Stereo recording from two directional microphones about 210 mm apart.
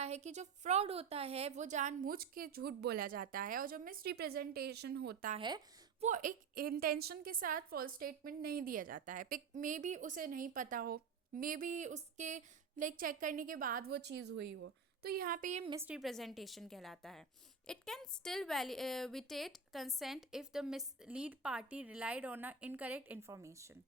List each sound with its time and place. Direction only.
0.0 s a woman's voice: 30° right (ahead or behind); by 5.3 s 50° right (ahead or behind)
5.4 s speech: 20° right (ahead or behind)
6.0 s a woman's voice: 40° right (ahead or behind)
15.7 s a woman's voice: 10° right (ahead or behind)